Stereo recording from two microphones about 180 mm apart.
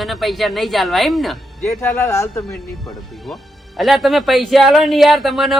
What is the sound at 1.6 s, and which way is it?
Speech, 15° left (ahead or behind).